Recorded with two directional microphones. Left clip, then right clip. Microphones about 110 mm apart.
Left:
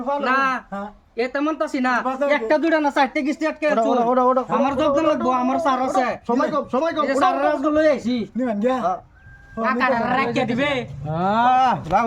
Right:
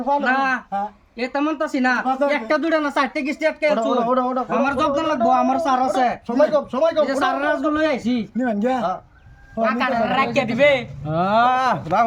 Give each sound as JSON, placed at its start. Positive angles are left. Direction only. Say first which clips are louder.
{"t": 0.2, "sound": "a woman's voice", "louder": "even", "side_deg": -15}
{"t": 4.5, "sound": "a woman's voice", "louder": "even", "side_deg": -25}